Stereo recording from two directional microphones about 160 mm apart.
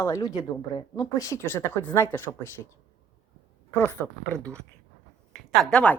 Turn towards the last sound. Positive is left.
turn(degrees=5)  # may be behind; listen again after turning